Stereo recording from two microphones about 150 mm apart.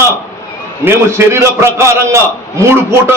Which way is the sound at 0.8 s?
15° right (ahead or behind).